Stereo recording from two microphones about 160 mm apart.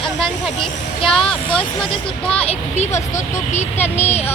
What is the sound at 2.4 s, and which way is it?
Speech, 40° left (ahead or behind).